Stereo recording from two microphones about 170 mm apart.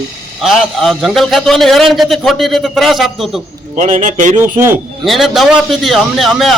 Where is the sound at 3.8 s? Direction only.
45° right (ahead or behind).